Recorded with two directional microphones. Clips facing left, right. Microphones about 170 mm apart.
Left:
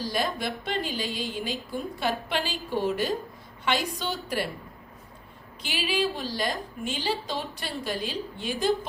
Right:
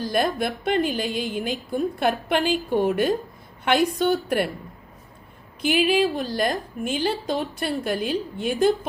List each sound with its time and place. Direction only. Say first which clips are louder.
0.0 s a woman's voice: right 6 dB; 55° right (ahead or behind)
5.6 s a woman's voice: right 8 dB; 55° right (ahead or behind)